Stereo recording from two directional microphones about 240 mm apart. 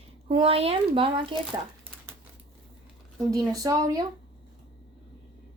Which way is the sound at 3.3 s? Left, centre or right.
Centre.